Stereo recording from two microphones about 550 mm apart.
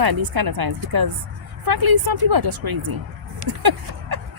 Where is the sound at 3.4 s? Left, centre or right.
Right.